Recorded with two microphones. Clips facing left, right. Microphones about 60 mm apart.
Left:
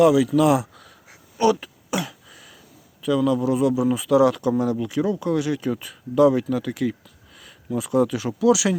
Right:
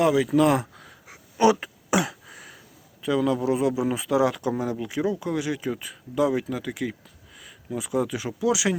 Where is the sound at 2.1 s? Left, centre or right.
Right.